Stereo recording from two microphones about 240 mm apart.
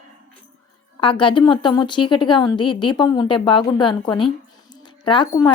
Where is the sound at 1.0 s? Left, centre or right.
Centre.